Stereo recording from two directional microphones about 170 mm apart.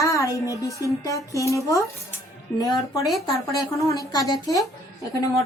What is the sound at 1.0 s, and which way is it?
Speech, 20° left (ahead or behind).